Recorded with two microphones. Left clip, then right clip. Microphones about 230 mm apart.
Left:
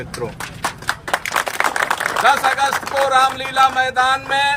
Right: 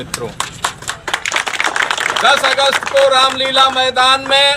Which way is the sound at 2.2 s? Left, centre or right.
Left.